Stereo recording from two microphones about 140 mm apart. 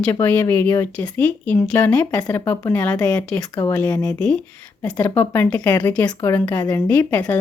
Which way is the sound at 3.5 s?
25° left (ahead or behind).